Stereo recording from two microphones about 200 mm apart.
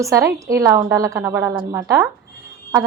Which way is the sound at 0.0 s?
15° right (ahead or behind).